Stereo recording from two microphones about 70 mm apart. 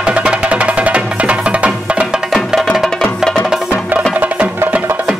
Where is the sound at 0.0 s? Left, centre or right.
Centre.